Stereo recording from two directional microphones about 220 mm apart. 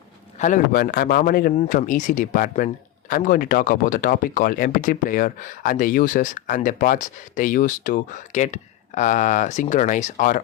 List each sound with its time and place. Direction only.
0.3 s speech: 35° left (ahead or behind)